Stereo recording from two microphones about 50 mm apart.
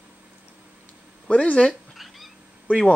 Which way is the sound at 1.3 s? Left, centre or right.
Left.